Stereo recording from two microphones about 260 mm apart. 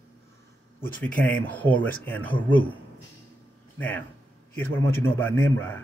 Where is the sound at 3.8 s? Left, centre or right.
Centre.